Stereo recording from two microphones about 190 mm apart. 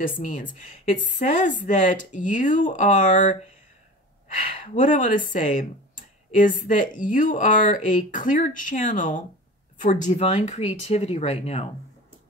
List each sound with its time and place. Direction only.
0.0 s speech: 45° left (ahead or behind)
4.7 s speech: 40° left (ahead or behind)